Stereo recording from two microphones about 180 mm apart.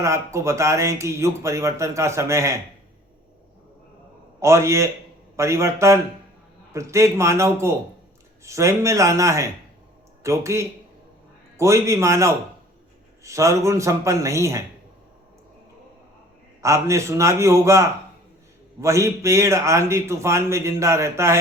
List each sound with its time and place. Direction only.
0.0 s speech: 15° right (ahead or behind)
4.4 s speech: 15° right (ahead or behind)
16.6 s speech: 15° right (ahead or behind)